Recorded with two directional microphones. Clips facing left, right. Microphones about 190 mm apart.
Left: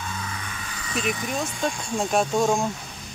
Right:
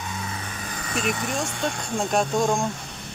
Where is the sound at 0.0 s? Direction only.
20° right (ahead or behind); by 1.8 s 70° right (ahead or behind).